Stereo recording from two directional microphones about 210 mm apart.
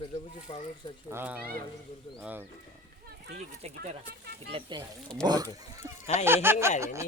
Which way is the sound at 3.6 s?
30° right (ahead or behind).